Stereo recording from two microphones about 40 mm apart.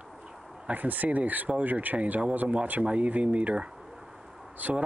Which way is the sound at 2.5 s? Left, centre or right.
Right.